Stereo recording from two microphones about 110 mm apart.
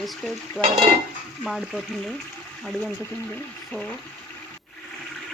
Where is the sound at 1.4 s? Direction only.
Centre (ahead or behind).